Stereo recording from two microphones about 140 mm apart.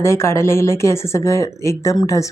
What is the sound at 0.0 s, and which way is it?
A woman's voice, 20° left (ahead or behind).